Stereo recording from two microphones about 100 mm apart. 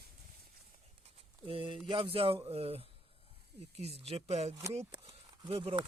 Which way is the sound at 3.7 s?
90° right.